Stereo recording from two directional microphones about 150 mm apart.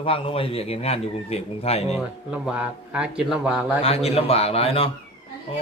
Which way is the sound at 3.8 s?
40° left (ahead or behind).